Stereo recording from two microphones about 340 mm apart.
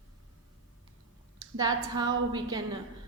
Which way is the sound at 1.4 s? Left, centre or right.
Centre.